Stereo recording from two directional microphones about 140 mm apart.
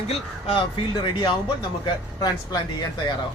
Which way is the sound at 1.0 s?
35° left (ahead or behind).